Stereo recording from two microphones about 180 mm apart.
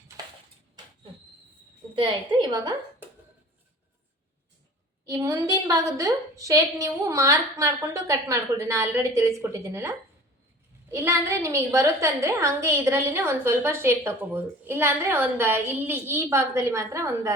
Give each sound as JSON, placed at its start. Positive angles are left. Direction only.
{"t": 2.0, "sound": "a woman's voice", "side_deg": -25}
{"t": 5.0, "sound": "a woman's voice", "side_deg": -20}